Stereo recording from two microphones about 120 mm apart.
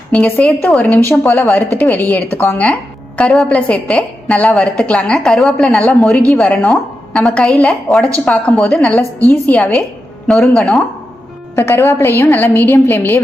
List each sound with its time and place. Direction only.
0.1 s a woman's voice: 10° left (ahead or behind)
10.2 s speech: centre (ahead or behind)
11.5 s a woman's voice: 20° left (ahead or behind)